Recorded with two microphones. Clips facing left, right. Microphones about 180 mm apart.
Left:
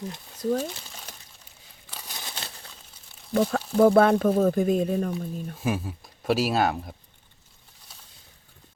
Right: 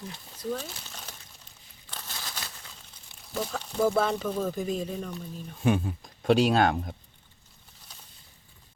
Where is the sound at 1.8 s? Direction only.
10° left (ahead or behind); by 2.5 s 25° left (ahead or behind).